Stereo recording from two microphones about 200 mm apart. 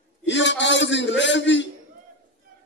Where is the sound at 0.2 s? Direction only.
65° left (ahead or behind).